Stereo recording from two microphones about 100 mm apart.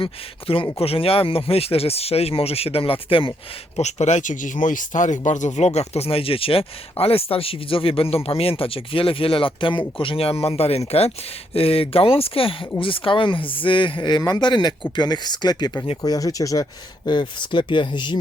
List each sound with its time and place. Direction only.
0.0 s speech: 60° left (ahead or behind)
3.8 s speech: 90° left
5.6 s speech: 90° left
11.5 s speech: 75° left (ahead or behind); by 14.2 s 55° left (ahead or behind)
14.2 s speech: 40° left (ahead or behind)
17.1 s speech: 50° left (ahead or behind)